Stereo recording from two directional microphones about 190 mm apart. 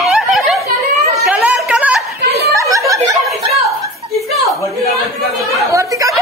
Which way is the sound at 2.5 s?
15° right (ahead or behind).